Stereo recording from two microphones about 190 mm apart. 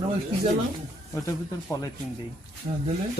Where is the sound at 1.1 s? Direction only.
20° left (ahead or behind).